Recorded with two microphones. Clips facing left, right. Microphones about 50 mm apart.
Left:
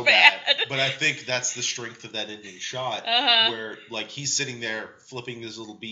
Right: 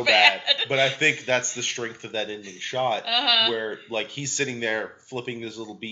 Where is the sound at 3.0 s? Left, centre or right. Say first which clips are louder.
Left 1 dB; centre.